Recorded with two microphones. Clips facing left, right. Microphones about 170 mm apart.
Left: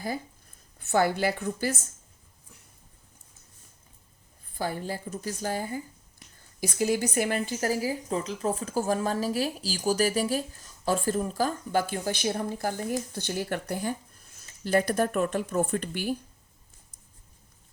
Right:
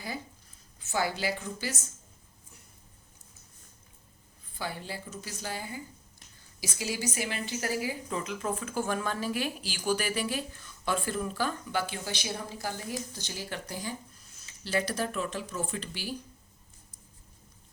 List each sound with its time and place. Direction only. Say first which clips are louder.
0.9 s speech: left 6 dB; 55° left (ahead or behind)
4.5 s speech: left 6 dB; 45° left (ahead or behind)